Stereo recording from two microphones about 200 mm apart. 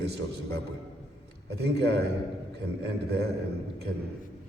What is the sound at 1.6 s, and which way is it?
Speech, 55° right (ahead or behind).